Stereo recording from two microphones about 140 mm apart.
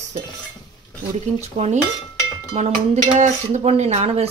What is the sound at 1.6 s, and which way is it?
Dishes, 45° right (ahead or behind).